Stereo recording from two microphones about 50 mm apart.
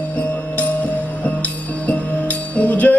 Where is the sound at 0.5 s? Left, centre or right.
Left.